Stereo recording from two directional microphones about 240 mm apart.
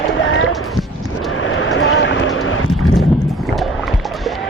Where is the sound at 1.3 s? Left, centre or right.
Left.